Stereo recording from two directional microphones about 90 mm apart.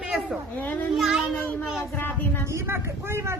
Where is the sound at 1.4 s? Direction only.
20° left (ahead or behind).